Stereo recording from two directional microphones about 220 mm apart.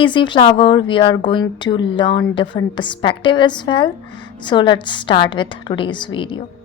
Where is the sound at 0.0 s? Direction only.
20° left (ahead or behind).